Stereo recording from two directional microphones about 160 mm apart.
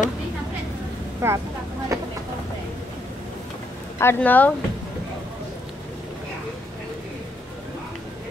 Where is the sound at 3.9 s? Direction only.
15° left (ahead or behind).